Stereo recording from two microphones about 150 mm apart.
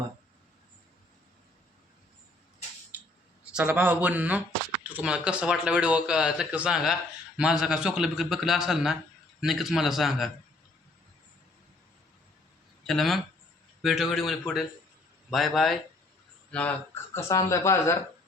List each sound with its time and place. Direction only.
3.5 s speech: 10° right (ahead or behind)
12.8 s speech: centre (ahead or behind); by 17.9 s 20° left (ahead or behind)